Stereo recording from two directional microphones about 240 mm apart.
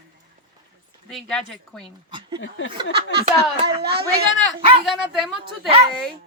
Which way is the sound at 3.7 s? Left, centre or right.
Right.